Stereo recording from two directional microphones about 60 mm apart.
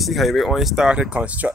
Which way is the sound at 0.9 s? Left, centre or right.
Centre.